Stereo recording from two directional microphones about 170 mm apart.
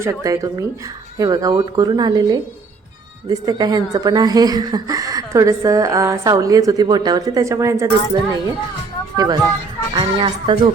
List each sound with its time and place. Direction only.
0.0 s speech: 20° right (ahead or behind)